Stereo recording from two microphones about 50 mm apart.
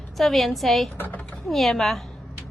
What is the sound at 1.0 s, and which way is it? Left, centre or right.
Speech, left.